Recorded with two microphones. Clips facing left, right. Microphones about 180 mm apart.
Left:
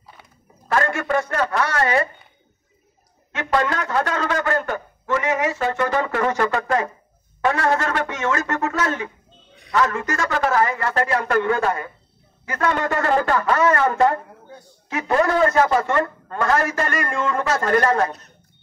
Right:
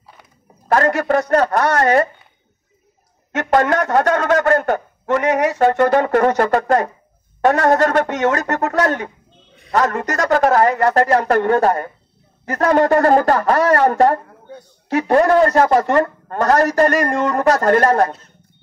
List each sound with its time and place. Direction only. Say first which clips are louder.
0.7 s a man's voice: right 6 dB; 40° right (ahead or behind)
3.3 s a man's voice: right 6 dB; 50° right (ahead or behind)
14.5 s a sound: right 5 dB; 20° right (ahead or behind)
14.9 s a man's voice: right 6 dB; 40° right (ahead or behind)